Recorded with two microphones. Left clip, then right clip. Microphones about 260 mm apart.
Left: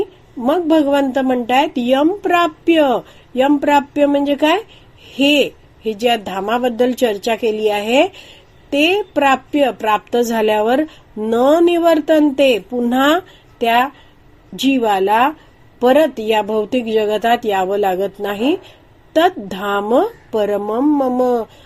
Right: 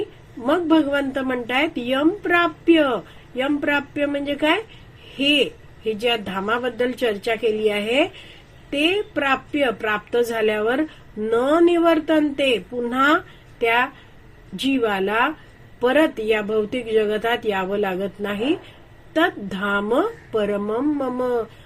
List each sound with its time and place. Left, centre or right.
0.4 s speech: left
6.0 s speech: left